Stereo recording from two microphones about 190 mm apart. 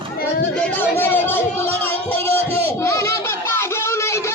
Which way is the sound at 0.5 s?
10° left (ahead or behind).